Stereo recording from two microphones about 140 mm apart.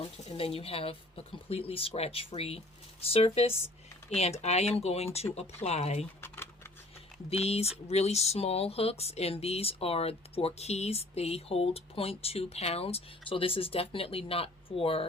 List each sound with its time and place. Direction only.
0.0 s speech: 45° left (ahead or behind)
6.2 s computer keyboard: 15° left (ahead or behind)
7.3 s speech: 45° left (ahead or behind)